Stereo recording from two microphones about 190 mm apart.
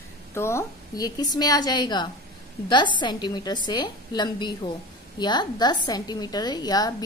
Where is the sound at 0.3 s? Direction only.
15° left (ahead or behind).